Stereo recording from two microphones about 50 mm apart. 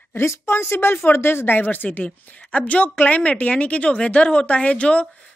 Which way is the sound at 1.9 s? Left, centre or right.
Left.